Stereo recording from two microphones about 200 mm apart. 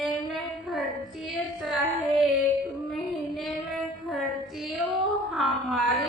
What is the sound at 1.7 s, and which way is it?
Child singing, centre (ahead or behind).